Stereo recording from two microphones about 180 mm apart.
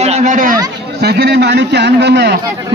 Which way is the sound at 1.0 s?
65° right (ahead or behind).